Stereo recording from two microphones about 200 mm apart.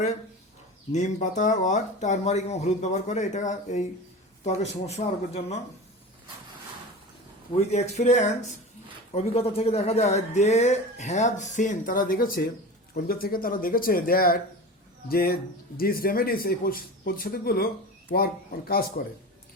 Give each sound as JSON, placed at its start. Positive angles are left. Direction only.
{"t": 0.9, "sound": "speech", "side_deg": 35}
{"t": 7.5, "sound": "speech", "side_deg": 35}